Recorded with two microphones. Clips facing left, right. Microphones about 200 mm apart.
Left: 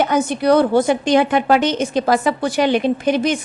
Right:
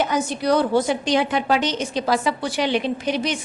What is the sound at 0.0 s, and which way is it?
A woman's voice, 55° left (ahead or behind).